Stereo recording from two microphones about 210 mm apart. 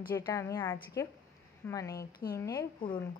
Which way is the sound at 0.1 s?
15° left (ahead or behind).